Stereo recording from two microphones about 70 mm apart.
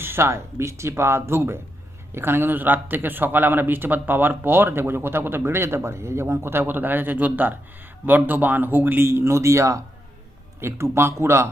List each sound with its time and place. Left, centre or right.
0.0 s speech: right